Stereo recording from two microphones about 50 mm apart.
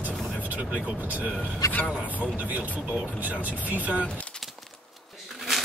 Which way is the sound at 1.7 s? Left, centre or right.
Left.